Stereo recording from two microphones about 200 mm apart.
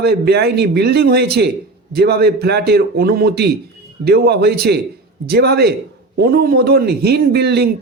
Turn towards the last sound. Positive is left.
turn(degrees=-55)  # may be behind; listen again after turning